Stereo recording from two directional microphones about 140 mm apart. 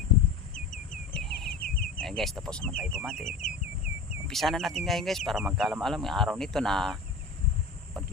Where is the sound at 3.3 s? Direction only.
65° left (ahead or behind).